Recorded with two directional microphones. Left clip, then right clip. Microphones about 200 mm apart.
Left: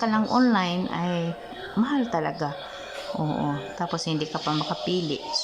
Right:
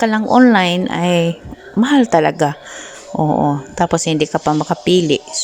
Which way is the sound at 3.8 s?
40° right (ahead or behind).